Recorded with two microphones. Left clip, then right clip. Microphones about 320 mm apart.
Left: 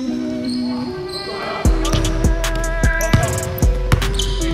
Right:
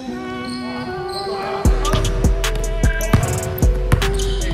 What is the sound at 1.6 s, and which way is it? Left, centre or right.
Music, centre.